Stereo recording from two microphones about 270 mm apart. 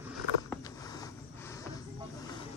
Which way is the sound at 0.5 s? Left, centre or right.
Centre.